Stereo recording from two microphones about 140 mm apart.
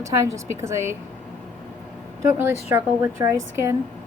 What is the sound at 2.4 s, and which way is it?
Speech, 15° right (ahead or behind).